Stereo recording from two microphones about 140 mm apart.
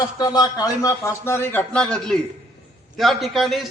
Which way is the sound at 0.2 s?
30° left (ahead or behind).